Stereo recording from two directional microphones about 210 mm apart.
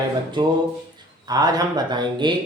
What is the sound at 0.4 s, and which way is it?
Speech, 20° right (ahead or behind).